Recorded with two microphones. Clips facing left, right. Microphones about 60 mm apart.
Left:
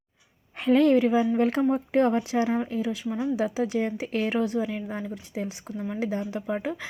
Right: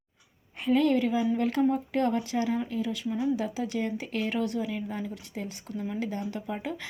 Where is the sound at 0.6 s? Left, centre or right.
Left.